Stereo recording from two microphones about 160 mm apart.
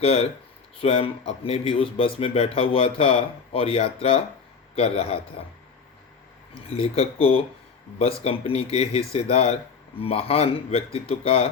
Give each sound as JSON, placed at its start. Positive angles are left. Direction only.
{"t": 0.0, "sound": "speech", "side_deg": 35}
{"t": 6.7, "sound": "speech", "side_deg": 40}